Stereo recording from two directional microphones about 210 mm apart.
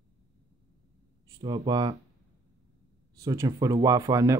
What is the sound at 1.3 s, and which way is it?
Speech, 20° right (ahead or behind).